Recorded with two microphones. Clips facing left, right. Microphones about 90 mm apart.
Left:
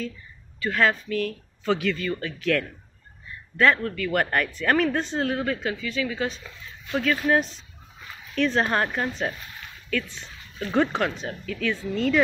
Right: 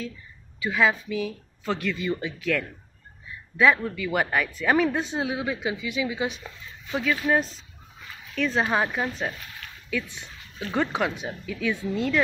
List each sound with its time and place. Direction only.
0.6 s speech: 5° right (ahead or behind)
2.0 s speech: 15° right (ahead or behind)
3.5 s a woman's voice: 10° right (ahead or behind)